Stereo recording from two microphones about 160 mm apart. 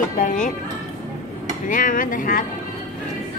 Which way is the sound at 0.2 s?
55° left (ahead or behind).